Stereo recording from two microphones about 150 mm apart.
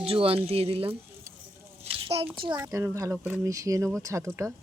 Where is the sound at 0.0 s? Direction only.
40° right (ahead or behind).